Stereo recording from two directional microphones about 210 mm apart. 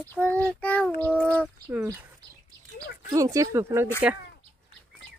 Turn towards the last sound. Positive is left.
turn(degrees=-15)  # may be behind; listen again after turning